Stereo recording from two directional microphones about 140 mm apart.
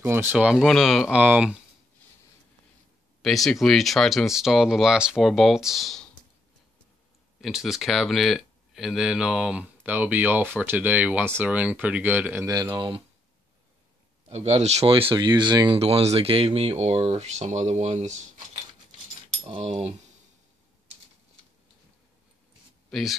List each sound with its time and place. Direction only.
0.0 s speech: 15° right (ahead or behind)
3.2 s speech: centre (ahead or behind)
7.4 s speech: centre (ahead or behind)
12.4 s speech: 25° right (ahead or behind)
14.3 s speech: 50° right (ahead or behind); by 15.8 s 35° right (ahead or behind)
15.8 s speech: 50° right (ahead or behind)
22.8 s speech: centre (ahead or behind)